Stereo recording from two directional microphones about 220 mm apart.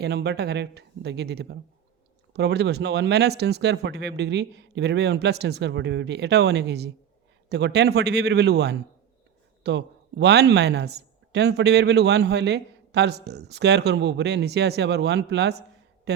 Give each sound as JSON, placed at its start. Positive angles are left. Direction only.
{"t": 0.0, "sound": "speech", "side_deg": -50}